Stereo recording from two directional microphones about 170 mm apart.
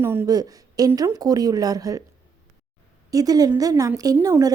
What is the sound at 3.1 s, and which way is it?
A woman's voice, 20° right (ahead or behind).